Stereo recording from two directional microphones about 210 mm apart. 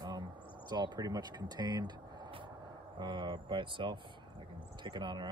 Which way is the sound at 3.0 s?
20° right (ahead or behind).